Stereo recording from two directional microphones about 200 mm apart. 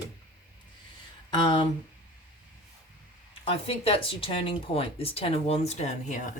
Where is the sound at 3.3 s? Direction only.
30° left (ahead or behind).